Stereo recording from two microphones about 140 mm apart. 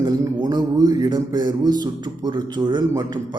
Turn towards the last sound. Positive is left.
turn(degrees=-30)  # may be behind; listen again after turning